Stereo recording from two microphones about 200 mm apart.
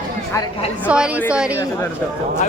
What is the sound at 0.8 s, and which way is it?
Speech, 5° right (ahead or behind).